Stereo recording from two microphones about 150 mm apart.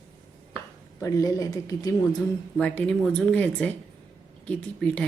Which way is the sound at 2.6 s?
5° left (ahead or behind).